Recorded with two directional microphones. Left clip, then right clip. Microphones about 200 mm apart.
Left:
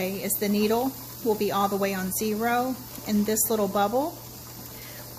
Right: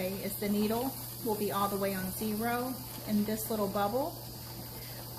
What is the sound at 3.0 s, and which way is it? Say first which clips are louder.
Speech: left 8 dB; 55° left (ahead or behind).